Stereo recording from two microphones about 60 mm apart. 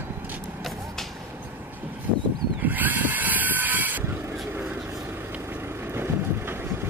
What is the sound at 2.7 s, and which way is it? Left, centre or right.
Vehicle, right.